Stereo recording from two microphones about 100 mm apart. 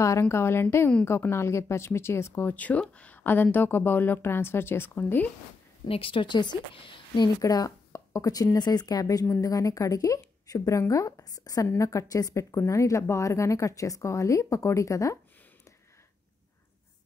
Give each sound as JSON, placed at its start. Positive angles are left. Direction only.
{"t": 0.0, "sound": "speech", "side_deg": 30}
{"t": 2.5, "sound": "speech", "side_deg": 15}
{"t": 5.9, "sound": "a woman's voice", "side_deg": 65}
{"t": 7.4, "sound": "speech", "side_deg": 40}